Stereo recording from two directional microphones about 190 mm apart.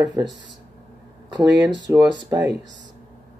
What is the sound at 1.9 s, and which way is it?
Speech, 10° right (ahead or behind).